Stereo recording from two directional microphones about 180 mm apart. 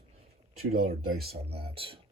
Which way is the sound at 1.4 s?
30° right (ahead or behind).